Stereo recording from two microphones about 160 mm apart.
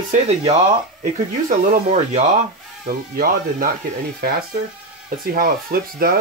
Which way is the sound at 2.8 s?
65° right (ahead or behind).